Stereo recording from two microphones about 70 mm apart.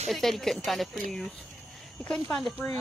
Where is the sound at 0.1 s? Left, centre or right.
Centre.